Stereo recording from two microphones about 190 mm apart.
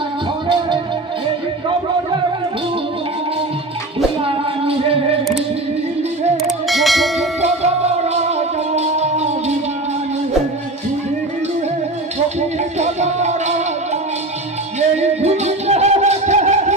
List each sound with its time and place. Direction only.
4.2 s female singing: 30° right (ahead or behind)
6.3 s bell: centre (ahead or behind)
7.4 s music: 35° right (ahead or behind)
12.4 s music: 35° right (ahead or behind)
14.8 s music: 35° right (ahead or behind)